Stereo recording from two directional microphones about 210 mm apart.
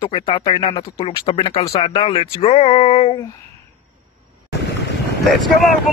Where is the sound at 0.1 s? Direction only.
25° left (ahead or behind).